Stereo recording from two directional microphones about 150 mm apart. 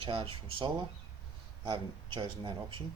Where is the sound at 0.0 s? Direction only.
35° right (ahead or behind).